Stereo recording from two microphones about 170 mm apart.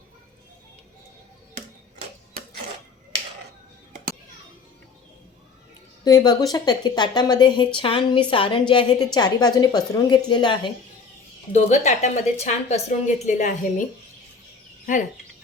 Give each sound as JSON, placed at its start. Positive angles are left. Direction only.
{"t": 6.1, "sound": "a woman's voice", "side_deg": 25}
{"t": 11.5, "sound": "a woman's voice", "side_deg": 40}